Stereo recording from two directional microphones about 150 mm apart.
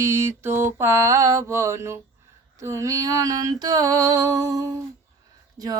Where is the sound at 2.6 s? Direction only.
20° right (ahead or behind).